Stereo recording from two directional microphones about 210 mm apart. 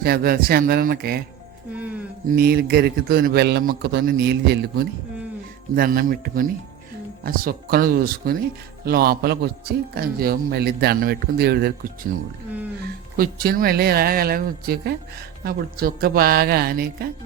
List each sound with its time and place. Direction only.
0.0 s a man's voice: 45° right (ahead or behind)
2.2 s a man's voice: 45° right (ahead or behind)
13.1 s a man's voice: 45° right (ahead or behind)